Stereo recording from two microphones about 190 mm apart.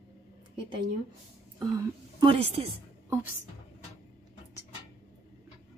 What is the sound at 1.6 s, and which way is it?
A woman's voice, 20° right (ahead or behind).